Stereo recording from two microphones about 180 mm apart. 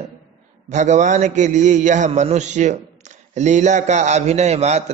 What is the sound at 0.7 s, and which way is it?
A man's voice, 40° right (ahead or behind).